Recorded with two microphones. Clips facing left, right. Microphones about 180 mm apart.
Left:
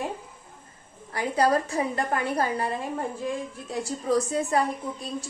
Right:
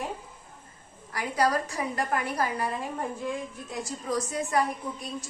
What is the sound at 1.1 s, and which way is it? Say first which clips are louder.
A woman's voice: left 3 dB; 30° left (ahead or behind).